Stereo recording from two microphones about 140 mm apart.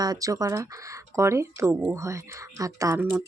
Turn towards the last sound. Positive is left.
turn(degrees=-20)  # may be behind; listen again after turning